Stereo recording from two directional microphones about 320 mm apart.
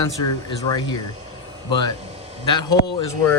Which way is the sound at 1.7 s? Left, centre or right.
Centre.